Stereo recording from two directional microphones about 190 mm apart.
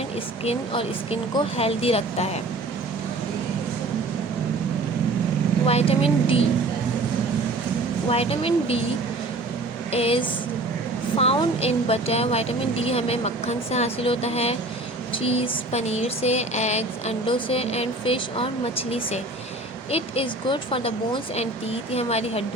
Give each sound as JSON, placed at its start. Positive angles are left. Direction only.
{"t": 0.4, "sound": "speech", "side_deg": 30}
{"t": 5.6, "sound": "speech", "side_deg": 30}
{"t": 8.1, "sound": "speech", "side_deg": 30}
{"t": 9.9, "sound": "speech", "side_deg": 30}